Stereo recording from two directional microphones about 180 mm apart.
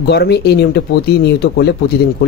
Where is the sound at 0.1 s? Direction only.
65° left (ahead or behind).